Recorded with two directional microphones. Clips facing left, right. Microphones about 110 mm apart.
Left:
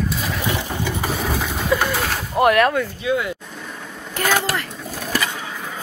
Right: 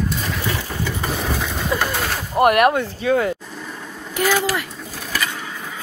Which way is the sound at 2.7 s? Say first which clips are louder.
Right 2 dB; 35° right (ahead or behind).